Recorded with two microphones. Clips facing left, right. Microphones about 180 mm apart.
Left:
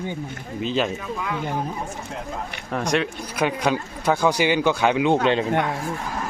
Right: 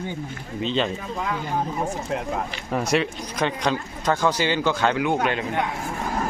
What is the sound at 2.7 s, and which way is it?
Speech, 5° right (ahead or behind).